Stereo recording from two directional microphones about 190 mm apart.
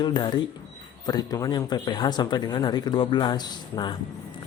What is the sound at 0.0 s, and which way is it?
Speech, 25° left (ahead or behind).